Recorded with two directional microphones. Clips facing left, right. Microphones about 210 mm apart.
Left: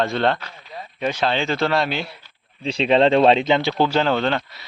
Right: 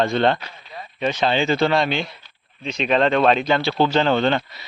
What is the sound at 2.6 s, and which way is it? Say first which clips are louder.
Speech: left 3 dB; 30° left (ahead or behind).